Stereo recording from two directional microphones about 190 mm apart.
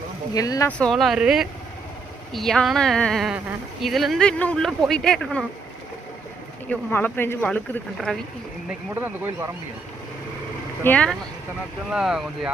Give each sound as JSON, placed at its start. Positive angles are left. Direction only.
{"t": 0.3, "sound": "speech", "side_deg": 20}
{"t": 0.8, "sound": "speech", "side_deg": 0}
{"t": 6.7, "sound": "speech", "side_deg": 10}
{"t": 9.0, "sound": "speech", "side_deg": -10}
{"t": 10.8, "sound": "speech", "side_deg": 5}